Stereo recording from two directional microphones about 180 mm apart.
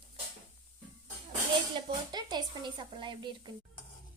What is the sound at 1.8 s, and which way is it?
Speech, 25° right (ahead or behind).